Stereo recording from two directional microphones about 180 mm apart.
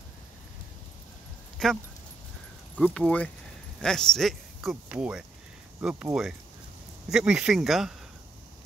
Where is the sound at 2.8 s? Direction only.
5° left (ahead or behind).